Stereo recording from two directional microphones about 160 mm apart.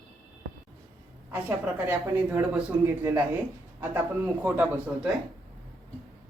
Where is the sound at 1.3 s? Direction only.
10° right (ahead or behind).